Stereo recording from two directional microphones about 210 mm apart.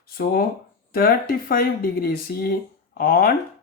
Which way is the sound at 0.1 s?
45° left (ahead or behind).